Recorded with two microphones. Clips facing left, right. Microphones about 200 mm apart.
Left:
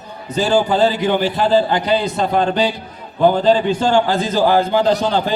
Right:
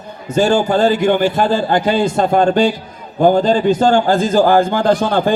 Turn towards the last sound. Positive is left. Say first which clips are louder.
# right 3 dB
turn(degrees=-50)  # may be behind; listen again after turning